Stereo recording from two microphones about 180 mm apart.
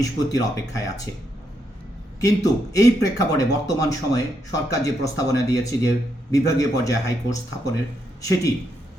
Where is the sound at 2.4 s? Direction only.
20° left (ahead or behind).